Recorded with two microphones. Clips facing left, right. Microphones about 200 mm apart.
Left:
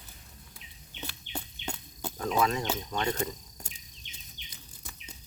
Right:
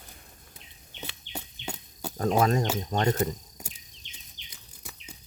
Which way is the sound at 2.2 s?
45° right (ahead or behind).